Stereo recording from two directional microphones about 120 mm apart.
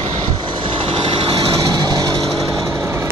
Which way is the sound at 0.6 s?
45° right (ahead or behind).